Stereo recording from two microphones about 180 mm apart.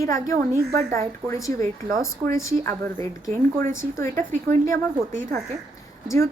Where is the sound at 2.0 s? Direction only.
15° left (ahead or behind).